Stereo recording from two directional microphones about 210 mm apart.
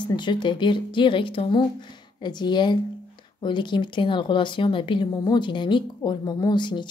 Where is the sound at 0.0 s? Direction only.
20° left (ahead or behind).